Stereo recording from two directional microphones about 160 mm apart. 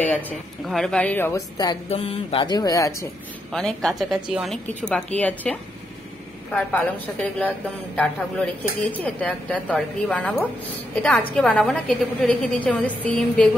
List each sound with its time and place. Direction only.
0.0 s a woman's voice: 10° left (ahead or behind)
1.9 s speech: 40° left (ahead or behind); by 3.1 s 20° left (ahead or behind)
3.5 s a woman's voice: 5° left (ahead or behind)